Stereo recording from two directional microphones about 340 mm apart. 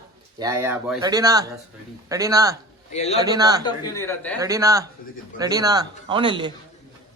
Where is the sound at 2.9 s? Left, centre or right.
Centre.